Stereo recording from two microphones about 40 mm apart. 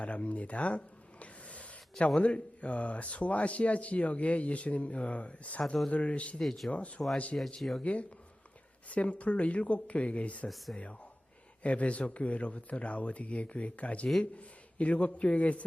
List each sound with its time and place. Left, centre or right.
0.0 s a sound: left
2.1 s speech: left
7.8 s speech: left
11.6 s speech: left